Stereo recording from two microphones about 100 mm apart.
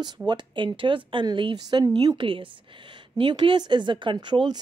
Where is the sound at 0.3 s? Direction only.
50° right (ahead or behind).